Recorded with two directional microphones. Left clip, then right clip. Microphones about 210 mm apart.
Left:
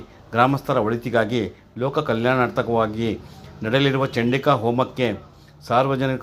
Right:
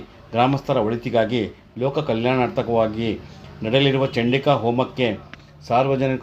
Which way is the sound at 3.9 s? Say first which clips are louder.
Right 1 dB; 5° left (ahead or behind).